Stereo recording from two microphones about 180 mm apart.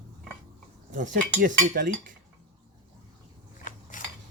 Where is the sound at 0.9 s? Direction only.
45° right (ahead or behind).